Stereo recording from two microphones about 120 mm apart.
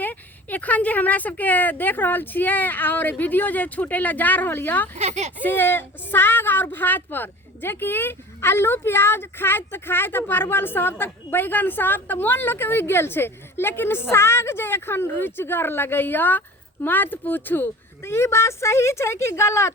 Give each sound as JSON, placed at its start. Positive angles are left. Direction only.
{"t": 0.0, "sound": "a woman's voice", "side_deg": 15}
{"t": 4.9, "sound": "speech", "side_deg": -70}
{"t": 5.4, "sound": "a woman's voice", "side_deg": 15}